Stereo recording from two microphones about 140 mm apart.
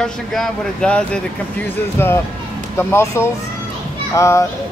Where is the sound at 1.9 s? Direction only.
20° left (ahead or behind).